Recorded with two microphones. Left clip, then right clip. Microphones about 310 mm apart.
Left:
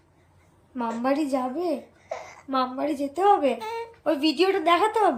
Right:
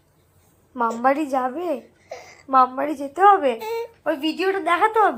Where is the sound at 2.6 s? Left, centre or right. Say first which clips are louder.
Right 6 dB; right.